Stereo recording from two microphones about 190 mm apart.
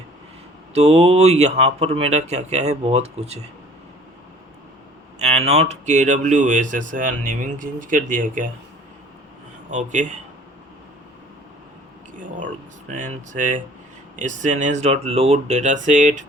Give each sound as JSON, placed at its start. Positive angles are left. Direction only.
{"t": 0.7, "sound": "speech", "side_deg": -35}
{"t": 5.2, "sound": "speech", "side_deg": -35}
{"t": 9.6, "sound": "speech", "side_deg": -40}
{"t": 12.9, "sound": "speech", "side_deg": -45}